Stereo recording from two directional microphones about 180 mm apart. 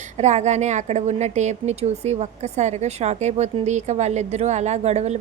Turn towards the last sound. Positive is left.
turn(degrees=-35)  # may be behind; listen again after turning